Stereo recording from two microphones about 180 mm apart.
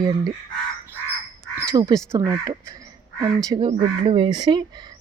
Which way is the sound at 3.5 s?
30° right (ahead or behind).